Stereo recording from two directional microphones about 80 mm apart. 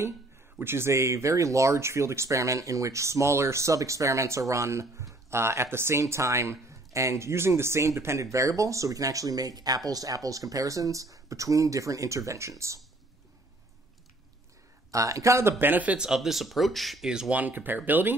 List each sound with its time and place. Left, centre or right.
0.6 s speech: right
14.9 s speech: right
15.6 s speech: right
16.1 s speech: centre
17.4 s speech: right